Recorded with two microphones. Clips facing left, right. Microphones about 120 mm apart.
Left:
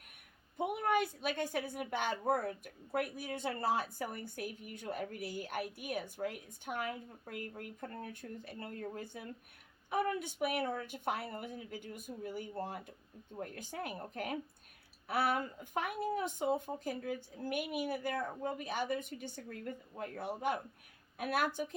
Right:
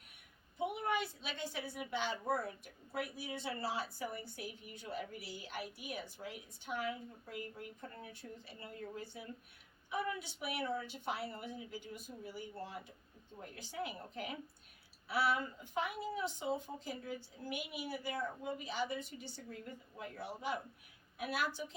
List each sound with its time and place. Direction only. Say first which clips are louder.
0.5 s a woman's voice: left 4 dB; 50° left (ahead or behind)